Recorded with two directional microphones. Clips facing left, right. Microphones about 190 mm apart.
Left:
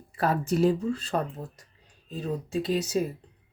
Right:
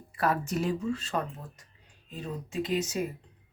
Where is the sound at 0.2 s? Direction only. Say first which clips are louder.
Left 5 dB; 30° left (ahead or behind).